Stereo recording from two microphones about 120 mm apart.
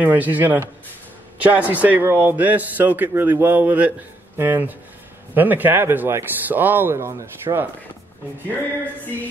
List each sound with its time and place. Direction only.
0.0 s a man's voice: 15° right (ahead or behind)